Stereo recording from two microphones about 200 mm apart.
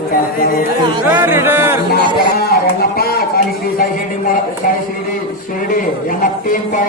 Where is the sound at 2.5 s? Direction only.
50° left (ahead or behind).